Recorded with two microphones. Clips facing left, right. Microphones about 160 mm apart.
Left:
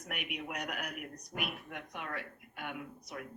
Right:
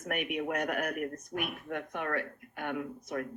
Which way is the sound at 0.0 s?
50° right (ahead or behind).